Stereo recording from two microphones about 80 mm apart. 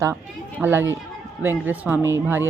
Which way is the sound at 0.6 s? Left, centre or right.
Right.